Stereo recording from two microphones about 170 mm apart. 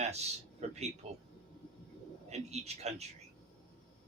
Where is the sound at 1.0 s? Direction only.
40° right (ahead or behind).